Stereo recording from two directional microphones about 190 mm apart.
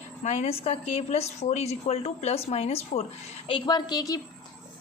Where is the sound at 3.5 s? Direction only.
25° left (ahead or behind).